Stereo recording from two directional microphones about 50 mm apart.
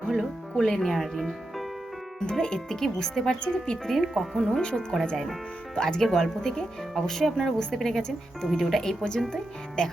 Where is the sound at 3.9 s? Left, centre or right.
Centre.